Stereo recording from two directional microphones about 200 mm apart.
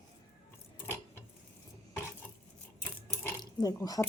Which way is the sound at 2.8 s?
5° left (ahead or behind).